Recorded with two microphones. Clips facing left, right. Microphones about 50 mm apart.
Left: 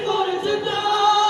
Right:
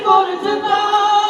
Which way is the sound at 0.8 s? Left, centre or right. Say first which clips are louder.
Right 2 dB; right.